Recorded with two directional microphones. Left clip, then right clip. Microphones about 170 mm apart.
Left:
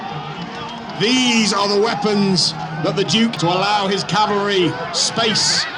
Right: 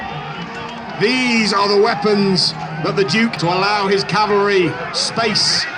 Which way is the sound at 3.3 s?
90° left.